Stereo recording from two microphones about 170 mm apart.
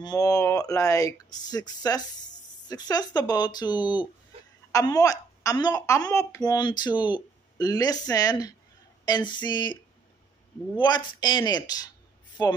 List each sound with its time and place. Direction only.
0.0 s a woman's voice: 20° left (ahead or behind)
10.8 s a woman's voice: 25° left (ahead or behind)